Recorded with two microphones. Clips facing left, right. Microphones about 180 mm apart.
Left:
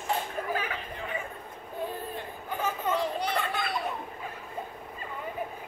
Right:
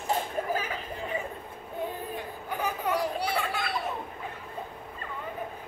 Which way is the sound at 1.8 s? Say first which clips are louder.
Right 1 dB; 15° right (ahead or behind).